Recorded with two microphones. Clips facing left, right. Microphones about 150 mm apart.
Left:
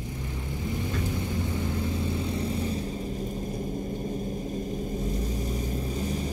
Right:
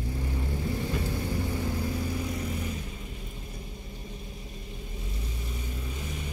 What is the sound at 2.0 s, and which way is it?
Vehicle, 25° left (ahead or behind).